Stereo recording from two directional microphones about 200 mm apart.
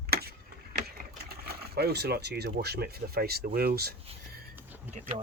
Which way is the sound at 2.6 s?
55° right (ahead or behind).